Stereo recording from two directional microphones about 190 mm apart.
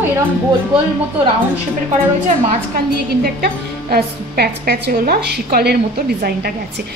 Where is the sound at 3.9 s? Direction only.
55° right (ahead or behind).